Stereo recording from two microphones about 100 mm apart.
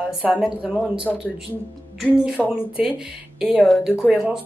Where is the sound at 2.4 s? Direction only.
5° right (ahead or behind).